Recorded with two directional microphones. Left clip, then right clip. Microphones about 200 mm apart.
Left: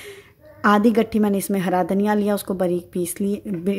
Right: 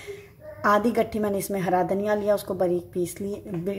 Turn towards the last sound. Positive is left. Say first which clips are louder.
# left 5 dB
turn(degrees=50)  # may be behind; listen again after turning